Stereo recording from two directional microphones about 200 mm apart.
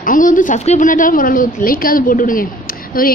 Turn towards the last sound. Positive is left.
turn(degrees=45)  # may be behind; listen again after turning